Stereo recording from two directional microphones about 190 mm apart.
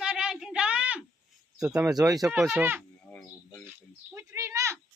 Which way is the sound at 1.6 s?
5° right (ahead or behind).